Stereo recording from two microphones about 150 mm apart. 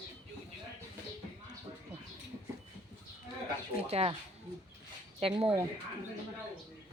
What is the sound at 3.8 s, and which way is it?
Speech, 40° right (ahead or behind).